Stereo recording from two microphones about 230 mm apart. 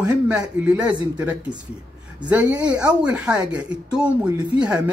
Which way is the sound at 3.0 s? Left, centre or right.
Centre.